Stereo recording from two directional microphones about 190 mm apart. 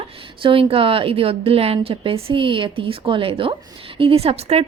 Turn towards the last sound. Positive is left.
turn(degrees=-30)  # may be behind; listen again after turning